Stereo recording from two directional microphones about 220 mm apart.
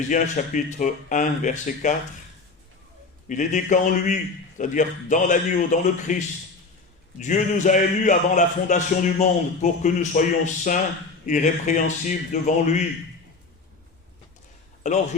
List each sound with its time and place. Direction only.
0.1 s a man's voice: 35° left (ahead or behind)
3.2 s a man's voice: 35° left (ahead or behind)
14.8 s a man's voice: 35° left (ahead or behind)